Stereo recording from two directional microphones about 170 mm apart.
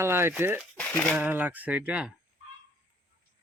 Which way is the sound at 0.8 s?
10° left (ahead or behind).